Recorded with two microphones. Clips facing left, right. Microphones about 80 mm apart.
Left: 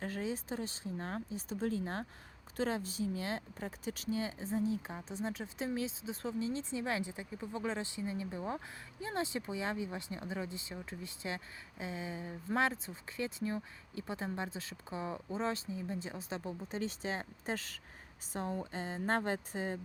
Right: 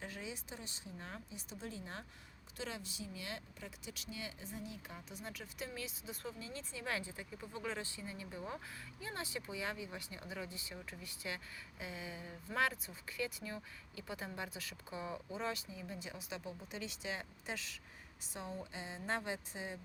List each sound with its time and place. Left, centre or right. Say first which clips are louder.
0.0 s speech: left 9 dB; left